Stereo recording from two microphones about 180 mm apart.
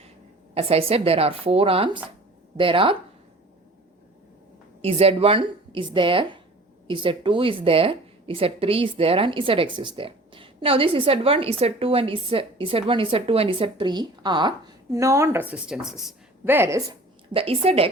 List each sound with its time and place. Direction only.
0.5 s a woman's voice: 35° right (ahead or behind)
4.8 s a woman's voice: 35° right (ahead or behind); by 16.8 s 15° right (ahead or behind)
17.3 s speech: 30° right (ahead or behind)